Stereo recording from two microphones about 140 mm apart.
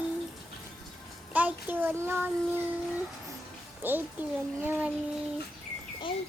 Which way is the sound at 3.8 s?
15° right (ahead or behind).